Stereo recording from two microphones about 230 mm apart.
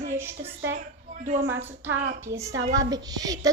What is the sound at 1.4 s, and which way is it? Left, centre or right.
Speech, right.